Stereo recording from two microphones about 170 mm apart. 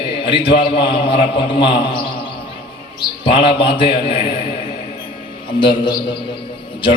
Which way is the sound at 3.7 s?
30° left (ahead or behind).